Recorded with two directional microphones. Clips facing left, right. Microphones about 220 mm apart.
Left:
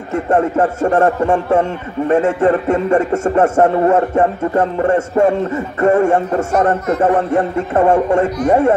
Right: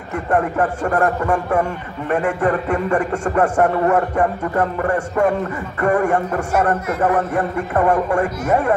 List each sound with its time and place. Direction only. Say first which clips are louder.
0.1 s a man's voice: left 5 dB; 25° left (ahead or behind)